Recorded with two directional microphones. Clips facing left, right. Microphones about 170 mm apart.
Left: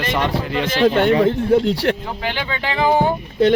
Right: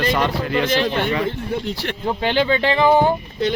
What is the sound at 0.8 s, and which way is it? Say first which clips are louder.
Speech: left 6 dB; 50° left (ahead or behind).